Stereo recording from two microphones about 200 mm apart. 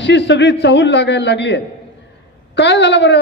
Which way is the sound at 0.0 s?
60° left (ahead or behind).